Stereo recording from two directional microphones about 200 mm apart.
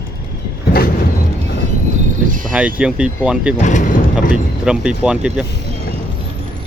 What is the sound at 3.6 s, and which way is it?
Speech, 40° left (ahead or behind).